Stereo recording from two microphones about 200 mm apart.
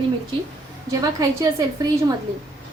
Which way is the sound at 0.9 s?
15° right (ahead or behind).